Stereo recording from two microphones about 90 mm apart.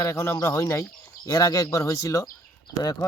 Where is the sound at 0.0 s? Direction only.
30° left (ahead or behind).